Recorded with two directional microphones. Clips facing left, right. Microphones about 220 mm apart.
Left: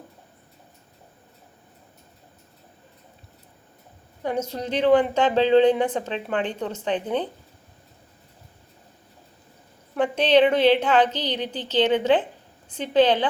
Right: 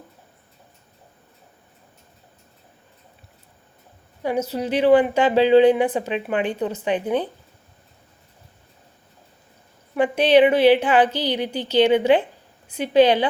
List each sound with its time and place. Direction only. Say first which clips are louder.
4.2 s a woman's voice: right 3 dB; 10° right (ahead or behind)
9.9 s a woman's voice: right 3 dB; 10° right (ahead or behind)